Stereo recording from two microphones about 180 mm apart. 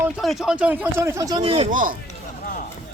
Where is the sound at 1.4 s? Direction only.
30° right (ahead or behind).